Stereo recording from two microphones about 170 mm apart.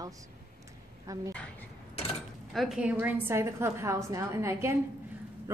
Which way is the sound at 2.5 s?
5° right (ahead or behind).